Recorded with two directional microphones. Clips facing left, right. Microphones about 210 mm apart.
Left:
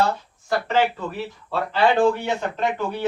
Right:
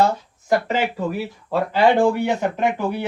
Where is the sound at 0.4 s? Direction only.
15° right (ahead or behind).